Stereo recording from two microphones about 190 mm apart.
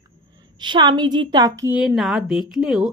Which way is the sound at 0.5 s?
25° right (ahead or behind).